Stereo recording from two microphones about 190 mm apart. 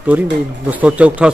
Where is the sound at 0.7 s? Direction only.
5° right (ahead or behind).